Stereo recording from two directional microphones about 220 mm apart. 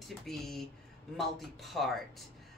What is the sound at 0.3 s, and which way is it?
Speech, centre (ahead or behind).